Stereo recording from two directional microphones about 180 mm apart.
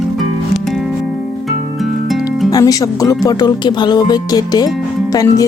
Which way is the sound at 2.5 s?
20° left (ahead or behind).